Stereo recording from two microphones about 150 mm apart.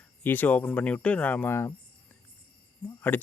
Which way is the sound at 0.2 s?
10° left (ahead or behind).